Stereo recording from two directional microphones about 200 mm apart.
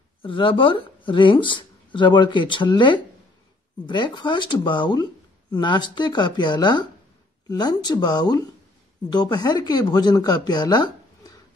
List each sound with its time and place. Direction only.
0.2 s speech: 25° left (ahead or behind)